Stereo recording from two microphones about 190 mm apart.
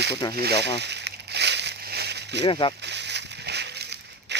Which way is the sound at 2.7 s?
65° right (ahead or behind).